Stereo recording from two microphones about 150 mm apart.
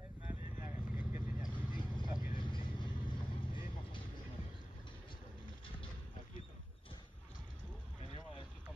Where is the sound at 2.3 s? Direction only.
30° left (ahead or behind).